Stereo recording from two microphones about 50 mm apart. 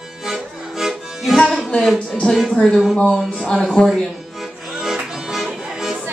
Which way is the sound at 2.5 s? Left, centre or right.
Centre.